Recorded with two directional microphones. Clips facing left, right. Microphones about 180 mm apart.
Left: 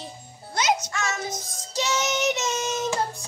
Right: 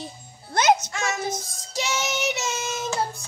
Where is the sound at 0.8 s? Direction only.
15° right (ahead or behind).